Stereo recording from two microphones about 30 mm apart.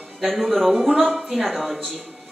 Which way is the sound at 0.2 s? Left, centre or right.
Centre.